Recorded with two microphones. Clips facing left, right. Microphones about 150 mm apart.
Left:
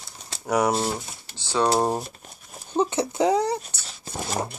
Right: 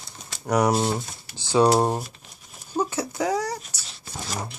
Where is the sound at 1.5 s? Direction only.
15° right (ahead or behind).